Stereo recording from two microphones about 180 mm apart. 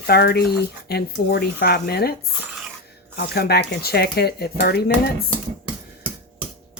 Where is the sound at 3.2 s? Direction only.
65° left (ahead or behind).